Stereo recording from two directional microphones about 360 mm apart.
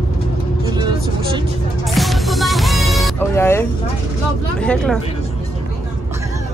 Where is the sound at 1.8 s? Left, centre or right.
Centre.